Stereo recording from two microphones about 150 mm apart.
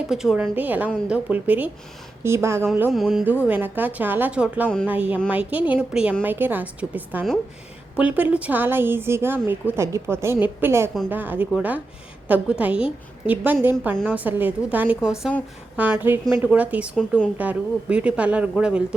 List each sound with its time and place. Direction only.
0.1 s speech: 5° right (ahead or behind)
2.9 s speech: centre (ahead or behind)
3.2 s speech: 10° right (ahead or behind)